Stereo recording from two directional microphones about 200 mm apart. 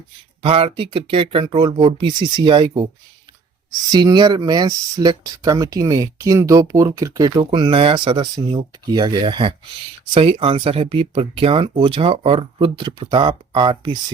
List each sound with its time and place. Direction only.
0.4 s speech: 30° right (ahead or behind)
3.9 s speech: 20° right (ahead or behind)